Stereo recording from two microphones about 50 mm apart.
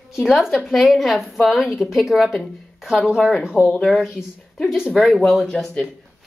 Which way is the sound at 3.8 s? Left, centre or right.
Centre.